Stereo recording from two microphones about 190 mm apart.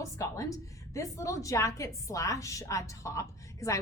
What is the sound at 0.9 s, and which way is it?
A woman's voice, 15° left (ahead or behind).